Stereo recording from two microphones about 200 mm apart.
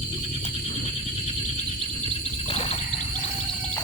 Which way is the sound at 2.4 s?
30° left (ahead or behind).